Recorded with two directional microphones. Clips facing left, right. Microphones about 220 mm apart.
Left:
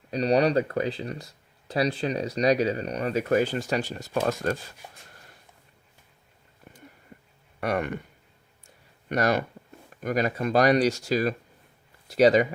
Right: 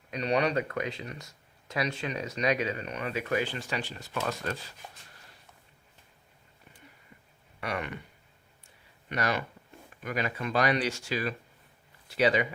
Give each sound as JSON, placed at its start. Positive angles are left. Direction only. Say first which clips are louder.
{"t": 0.1, "sound": "speech", "louder": "left 6 dB", "side_deg": 35}
{"t": 7.6, "sound": "speech", "louder": "left 7 dB", "side_deg": 45}
{"t": 9.0, "sound": "speech", "louder": "left 7 dB", "side_deg": 45}